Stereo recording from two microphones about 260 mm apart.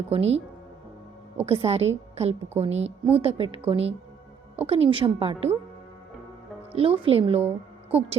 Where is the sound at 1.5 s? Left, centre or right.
Right.